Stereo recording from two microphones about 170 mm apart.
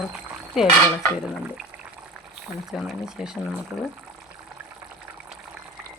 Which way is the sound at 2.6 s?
Centre (ahead or behind).